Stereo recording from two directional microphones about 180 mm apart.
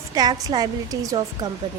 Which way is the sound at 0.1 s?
20° right (ahead or behind).